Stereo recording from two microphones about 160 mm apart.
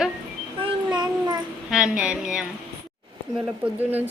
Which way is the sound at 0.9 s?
25° right (ahead or behind).